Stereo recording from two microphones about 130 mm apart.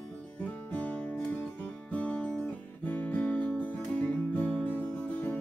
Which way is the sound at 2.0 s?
10° left (ahead or behind).